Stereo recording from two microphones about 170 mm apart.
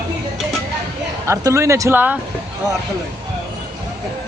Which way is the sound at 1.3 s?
15° right (ahead or behind).